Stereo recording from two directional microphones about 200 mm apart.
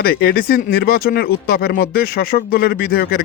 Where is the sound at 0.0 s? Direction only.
50° left (ahead or behind).